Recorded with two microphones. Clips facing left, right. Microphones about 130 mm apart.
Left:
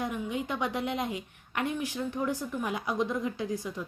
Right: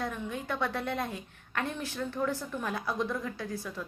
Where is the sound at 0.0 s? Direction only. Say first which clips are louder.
Left 3 dB; 15° left (ahead or behind).